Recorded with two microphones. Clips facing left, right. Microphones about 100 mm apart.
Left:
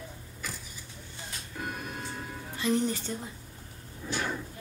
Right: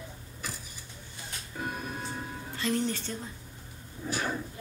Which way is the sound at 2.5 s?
15° left (ahead or behind).